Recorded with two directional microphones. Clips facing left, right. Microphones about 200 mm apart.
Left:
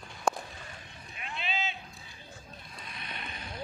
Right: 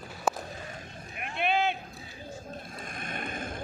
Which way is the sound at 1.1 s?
60° right (ahead or behind).